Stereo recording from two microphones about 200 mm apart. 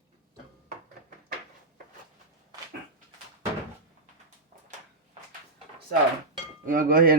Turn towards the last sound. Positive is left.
turn(degrees=-45)  # may be behind; listen again after turning